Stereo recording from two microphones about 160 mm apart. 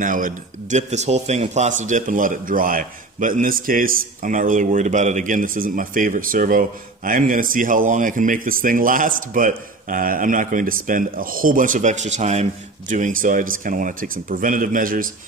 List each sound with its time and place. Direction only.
0.0 s speech: 55° right (ahead or behind)